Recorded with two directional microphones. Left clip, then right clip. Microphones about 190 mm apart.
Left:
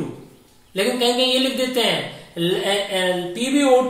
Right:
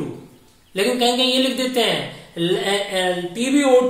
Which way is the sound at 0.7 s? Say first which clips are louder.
Right 1 dB; 20° right (ahead or behind).